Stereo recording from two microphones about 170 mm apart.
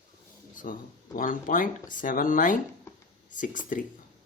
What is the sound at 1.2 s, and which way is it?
Speech, 55° left (ahead or behind).